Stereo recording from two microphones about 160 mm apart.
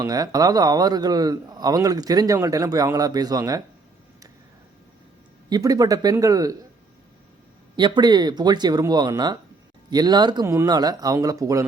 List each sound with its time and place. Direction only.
0.0 s a man's voice: 25° right (ahead or behind)
5.5 s a man's voice: 20° right (ahead or behind)
7.8 s a man's voice: 30° right (ahead or behind)